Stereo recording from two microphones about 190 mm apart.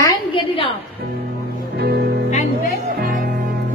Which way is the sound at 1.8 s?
60° right (ahead or behind).